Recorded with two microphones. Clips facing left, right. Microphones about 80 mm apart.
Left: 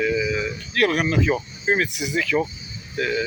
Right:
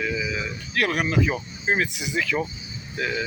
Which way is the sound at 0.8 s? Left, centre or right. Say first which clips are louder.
Left 4 dB; centre.